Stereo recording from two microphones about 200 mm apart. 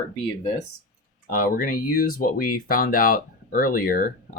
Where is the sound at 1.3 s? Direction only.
45° left (ahead or behind).